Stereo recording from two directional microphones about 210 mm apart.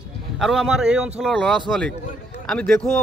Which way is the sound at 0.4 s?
Centre (ahead or behind).